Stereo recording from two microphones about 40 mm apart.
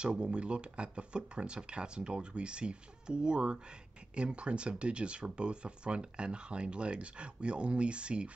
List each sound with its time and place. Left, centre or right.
0.0 s speech: right